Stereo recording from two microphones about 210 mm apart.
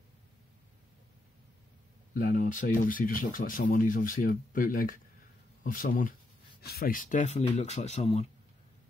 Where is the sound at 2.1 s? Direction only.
40° left (ahead or behind).